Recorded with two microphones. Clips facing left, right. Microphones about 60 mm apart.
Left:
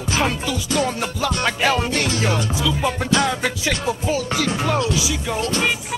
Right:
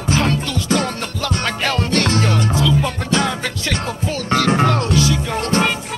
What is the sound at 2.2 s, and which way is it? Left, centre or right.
Music, centre.